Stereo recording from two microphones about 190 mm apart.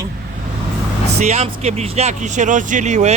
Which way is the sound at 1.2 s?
35° right (ahead or behind).